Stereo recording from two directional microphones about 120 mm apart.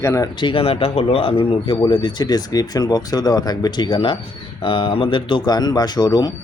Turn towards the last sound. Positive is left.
turn(degrees=35)  # may be behind; listen again after turning